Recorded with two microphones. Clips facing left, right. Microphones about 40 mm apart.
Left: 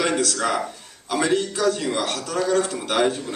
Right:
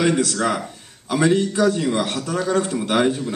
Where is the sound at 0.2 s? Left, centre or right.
Centre.